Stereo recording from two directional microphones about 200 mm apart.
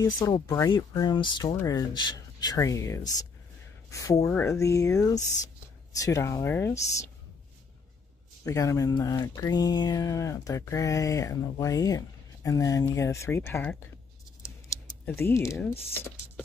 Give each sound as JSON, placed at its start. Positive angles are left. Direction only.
{"t": 0.0, "sound": "speech", "side_deg": 20}
{"t": 8.5, "sound": "speech", "side_deg": 15}